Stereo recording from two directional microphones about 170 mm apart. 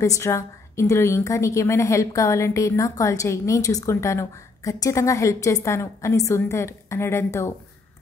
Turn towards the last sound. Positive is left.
turn(degrees=15)  # may be behind; listen again after turning